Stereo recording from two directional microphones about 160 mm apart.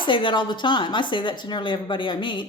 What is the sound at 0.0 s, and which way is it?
Speech, 30° left (ahead or behind).